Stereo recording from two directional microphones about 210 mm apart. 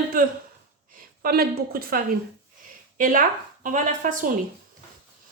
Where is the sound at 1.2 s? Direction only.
45° right (ahead or behind).